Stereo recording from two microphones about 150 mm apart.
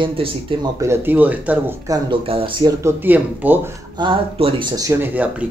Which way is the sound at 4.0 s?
35° right (ahead or behind).